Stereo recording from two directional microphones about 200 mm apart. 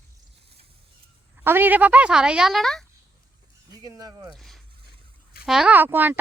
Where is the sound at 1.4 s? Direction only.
10° right (ahead or behind).